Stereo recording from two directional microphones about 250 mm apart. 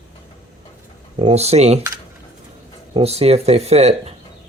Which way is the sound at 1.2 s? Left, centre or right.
Right.